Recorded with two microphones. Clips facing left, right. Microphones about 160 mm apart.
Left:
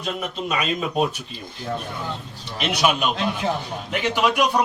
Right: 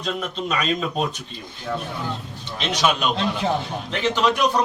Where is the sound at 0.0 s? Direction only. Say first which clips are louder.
Right 1 dB; 10° left (ahead or behind).